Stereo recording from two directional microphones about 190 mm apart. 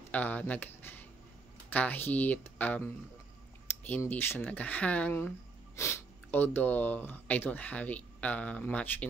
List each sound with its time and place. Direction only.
0.1 s speech: 10° left (ahead or behind)